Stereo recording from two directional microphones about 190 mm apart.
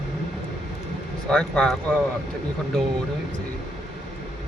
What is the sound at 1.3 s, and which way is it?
Speech, 5° left (ahead or behind).